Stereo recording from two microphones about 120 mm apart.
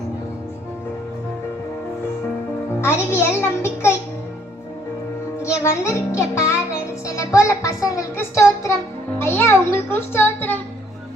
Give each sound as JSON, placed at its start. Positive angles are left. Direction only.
{"t": 2.8, "sound": "a child's voice", "side_deg": 20}
{"t": 5.4, "sound": "music", "side_deg": 25}
{"t": 7.1, "sound": "a child's voice", "side_deg": 25}